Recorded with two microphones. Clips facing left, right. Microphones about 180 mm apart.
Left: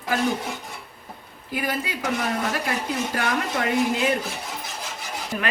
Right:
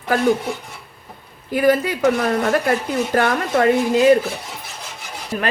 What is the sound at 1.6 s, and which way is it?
Speech, 55° right (ahead or behind).